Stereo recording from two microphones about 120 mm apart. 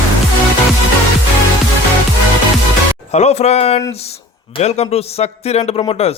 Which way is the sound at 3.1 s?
70° left (ahead or behind).